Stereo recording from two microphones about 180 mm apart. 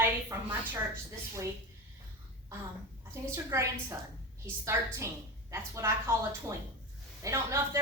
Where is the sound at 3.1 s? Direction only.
15° right (ahead or behind).